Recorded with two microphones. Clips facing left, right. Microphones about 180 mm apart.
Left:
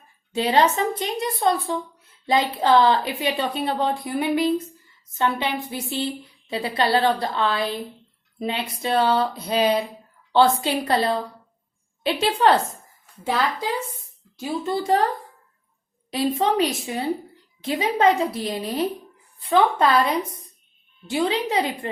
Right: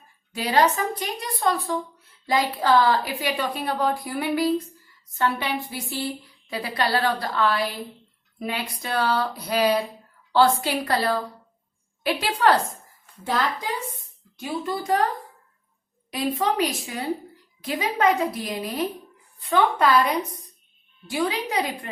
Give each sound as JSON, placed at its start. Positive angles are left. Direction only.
{"t": 0.3, "sound": "a woman's voice", "side_deg": 25}
{"t": 14.6, "sound": "a woman's voice", "side_deg": 25}
{"t": 16.1, "sound": "a woman's voice", "side_deg": 25}
{"t": 21.1, "sound": "a woman's voice", "side_deg": 25}